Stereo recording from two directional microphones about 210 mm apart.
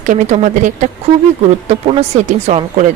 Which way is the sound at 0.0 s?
35° right (ahead or behind).